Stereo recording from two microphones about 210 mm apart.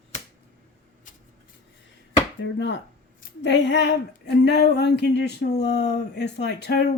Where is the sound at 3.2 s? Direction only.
55° left (ahead or behind).